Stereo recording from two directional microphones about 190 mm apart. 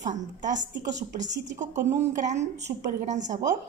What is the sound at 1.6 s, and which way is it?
Speech, 40° right (ahead or behind).